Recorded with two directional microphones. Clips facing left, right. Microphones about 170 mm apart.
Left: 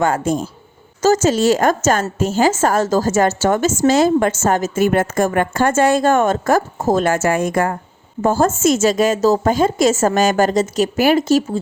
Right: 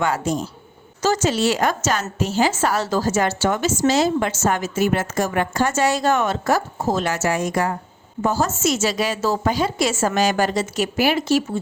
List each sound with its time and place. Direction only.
0.0 s a woman's voice: 50° left (ahead or behind)